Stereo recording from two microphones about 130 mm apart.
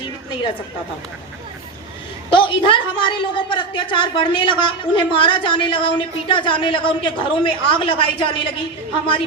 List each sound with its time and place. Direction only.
2.3 s a woman's voice: 40° left (ahead or behind)